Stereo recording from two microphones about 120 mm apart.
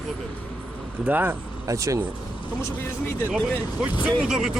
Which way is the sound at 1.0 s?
15° right (ahead or behind).